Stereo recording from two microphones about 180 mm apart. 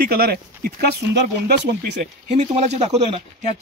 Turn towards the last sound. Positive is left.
turn(degrees=-35)  # may be behind; listen again after turning